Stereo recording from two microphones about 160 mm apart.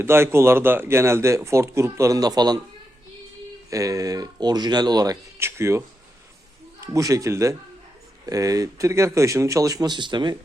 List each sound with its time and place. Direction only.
0.0 s a man's voice: 15° right (ahead or behind)
3.7 s speech: 20° right (ahead or behind)
6.8 s speech: 20° right (ahead or behind)